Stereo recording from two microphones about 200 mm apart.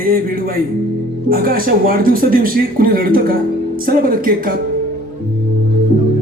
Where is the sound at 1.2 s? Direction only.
45° right (ahead or behind).